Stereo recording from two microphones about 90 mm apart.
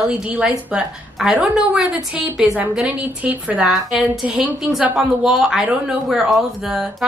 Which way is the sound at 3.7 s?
Centre (ahead or behind).